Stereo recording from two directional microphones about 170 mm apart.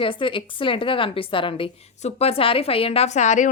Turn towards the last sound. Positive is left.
turn(degrees=45)  # may be behind; listen again after turning